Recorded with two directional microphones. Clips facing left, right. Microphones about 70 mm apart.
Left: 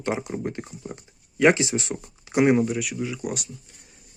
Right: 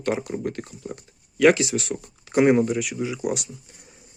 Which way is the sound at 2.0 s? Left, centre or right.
Centre.